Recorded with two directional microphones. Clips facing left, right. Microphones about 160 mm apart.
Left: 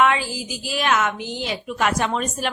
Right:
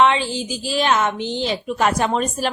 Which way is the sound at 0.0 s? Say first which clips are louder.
Right 3 dB; 25° right (ahead or behind).